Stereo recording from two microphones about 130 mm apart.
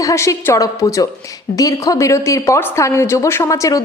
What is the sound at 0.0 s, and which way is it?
A woman's voice, 25° left (ahead or behind).